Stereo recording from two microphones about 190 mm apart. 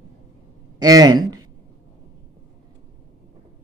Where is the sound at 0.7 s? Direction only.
20° right (ahead or behind).